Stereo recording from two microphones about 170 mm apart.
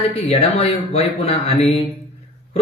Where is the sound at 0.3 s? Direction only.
40° left (ahead or behind).